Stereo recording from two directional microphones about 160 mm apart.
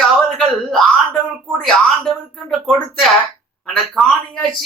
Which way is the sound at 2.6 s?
Centre (ahead or behind).